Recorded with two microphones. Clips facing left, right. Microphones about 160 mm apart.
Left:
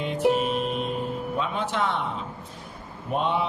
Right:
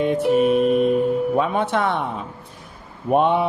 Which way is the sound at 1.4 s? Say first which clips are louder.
Right 7 dB; 55° right (ahead or behind).